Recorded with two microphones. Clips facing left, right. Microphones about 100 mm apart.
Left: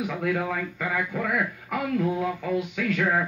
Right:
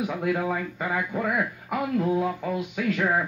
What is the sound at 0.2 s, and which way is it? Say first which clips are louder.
Speech: even; 20° right (ahead or behind).